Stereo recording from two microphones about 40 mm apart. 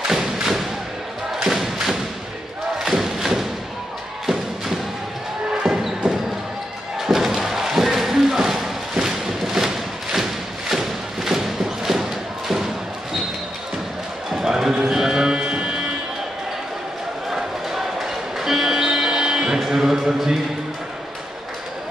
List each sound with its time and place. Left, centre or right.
0.1 s thump: centre
5.5 s music: centre
7.0 s a sound: centre
10.7 s thump: centre
14.3 s music: centre
17.3 s music: centre